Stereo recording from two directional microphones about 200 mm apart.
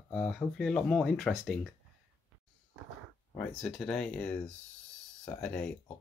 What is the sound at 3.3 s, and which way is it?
Speech, 5° left (ahead or behind).